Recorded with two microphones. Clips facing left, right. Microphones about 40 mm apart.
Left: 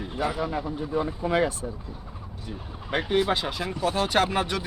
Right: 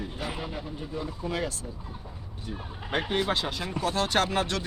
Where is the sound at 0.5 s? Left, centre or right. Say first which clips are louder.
Left 8 dB; left.